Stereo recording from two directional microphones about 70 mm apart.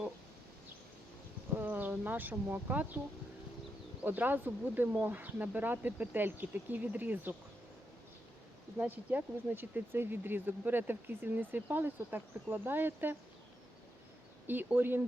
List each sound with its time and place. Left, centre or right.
1.5 s speech: right
4.0 s speech: right
8.8 s speech: right
14.4 s speech: right